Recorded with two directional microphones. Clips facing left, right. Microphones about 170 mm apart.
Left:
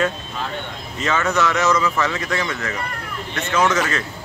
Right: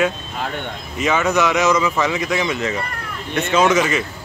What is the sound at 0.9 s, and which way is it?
Speech, 15° right (ahead or behind).